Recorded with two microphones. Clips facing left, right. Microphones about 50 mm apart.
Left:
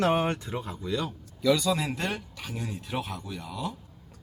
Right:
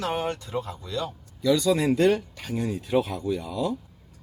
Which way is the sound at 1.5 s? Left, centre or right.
Centre.